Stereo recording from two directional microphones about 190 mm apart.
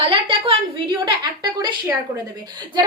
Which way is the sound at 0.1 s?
25° right (ahead or behind).